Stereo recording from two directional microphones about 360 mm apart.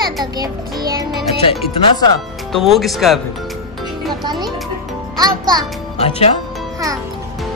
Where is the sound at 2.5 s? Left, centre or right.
Centre.